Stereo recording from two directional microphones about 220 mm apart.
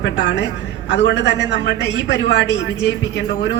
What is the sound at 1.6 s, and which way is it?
Speech, 55° left (ahead or behind).